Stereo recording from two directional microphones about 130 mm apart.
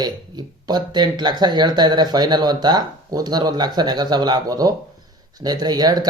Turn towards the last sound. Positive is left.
turn(degrees=-30)  # may be behind; listen again after turning